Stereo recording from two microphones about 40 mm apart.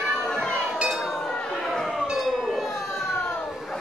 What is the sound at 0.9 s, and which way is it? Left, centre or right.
Chink, centre.